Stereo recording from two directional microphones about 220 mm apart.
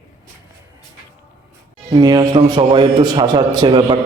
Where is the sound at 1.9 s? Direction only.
15° right (ahead or behind).